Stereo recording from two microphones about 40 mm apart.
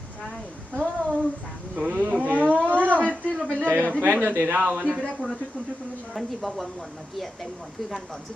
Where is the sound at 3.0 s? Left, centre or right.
Left.